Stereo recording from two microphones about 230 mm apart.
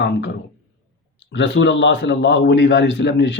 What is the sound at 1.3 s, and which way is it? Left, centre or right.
Speech, left.